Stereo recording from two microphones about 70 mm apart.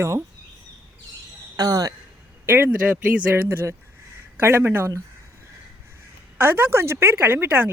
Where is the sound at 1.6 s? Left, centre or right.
Right.